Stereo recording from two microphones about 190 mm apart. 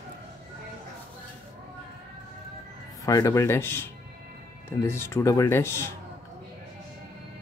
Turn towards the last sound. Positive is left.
turn(degrees=15)  # may be behind; listen again after turning